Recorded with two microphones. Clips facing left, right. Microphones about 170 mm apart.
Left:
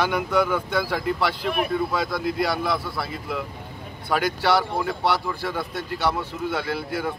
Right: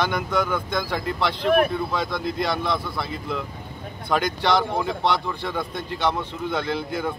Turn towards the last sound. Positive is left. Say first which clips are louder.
# right 1 dB
turn(degrees=5)  # may be behind; listen again after turning